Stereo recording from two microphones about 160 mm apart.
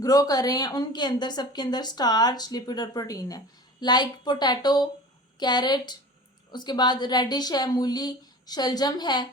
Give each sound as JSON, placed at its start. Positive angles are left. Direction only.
{"t": 0.0, "sound": "a woman's voice", "side_deg": 25}